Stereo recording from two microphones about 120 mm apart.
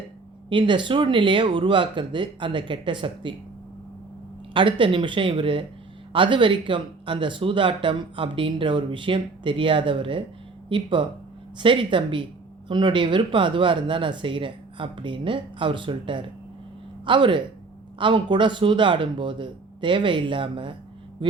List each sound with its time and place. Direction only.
0.5 s speech: 40° right (ahead or behind)
4.5 s speech: 45° right (ahead or behind)